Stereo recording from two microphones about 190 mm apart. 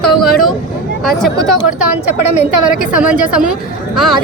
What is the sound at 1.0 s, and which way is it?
Speech, centre (ahead or behind).